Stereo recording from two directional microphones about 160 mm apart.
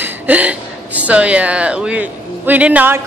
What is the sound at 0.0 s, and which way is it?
A woman's voice, 10° right (ahead or behind).